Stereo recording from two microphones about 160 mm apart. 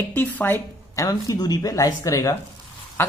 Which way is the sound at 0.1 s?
10° left (ahead or behind).